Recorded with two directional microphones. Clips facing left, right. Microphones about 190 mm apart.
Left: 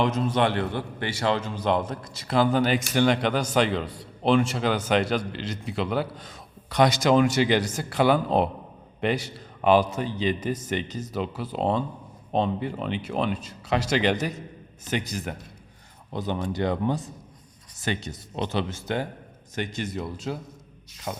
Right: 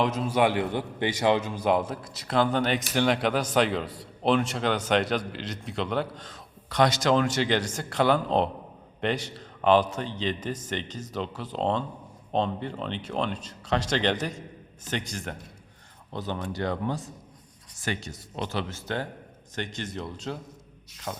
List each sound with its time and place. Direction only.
0.0 s a man's voice: 5° right (ahead or behind)
16.1 s speech: 15° left (ahead or behind)